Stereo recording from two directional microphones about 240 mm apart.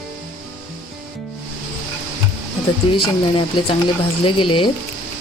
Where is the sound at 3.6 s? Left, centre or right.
Left.